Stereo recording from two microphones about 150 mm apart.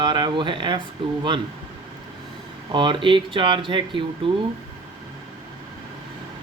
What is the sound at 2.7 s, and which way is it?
Speech, 30° right (ahead or behind).